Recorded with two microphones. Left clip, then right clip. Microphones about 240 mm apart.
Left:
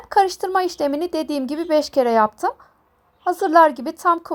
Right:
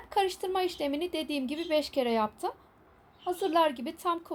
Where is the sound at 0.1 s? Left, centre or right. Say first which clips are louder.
Left 12 dB; left.